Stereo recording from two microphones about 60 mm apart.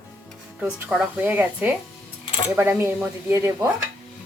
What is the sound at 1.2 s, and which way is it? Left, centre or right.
Speech, right.